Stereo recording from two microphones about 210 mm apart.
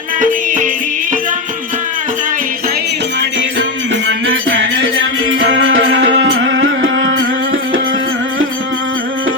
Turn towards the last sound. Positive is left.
turn(degrees=-70)  # may be behind; listen again after turning